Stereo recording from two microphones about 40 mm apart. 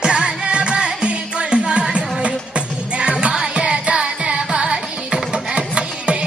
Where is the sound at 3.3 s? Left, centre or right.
Centre.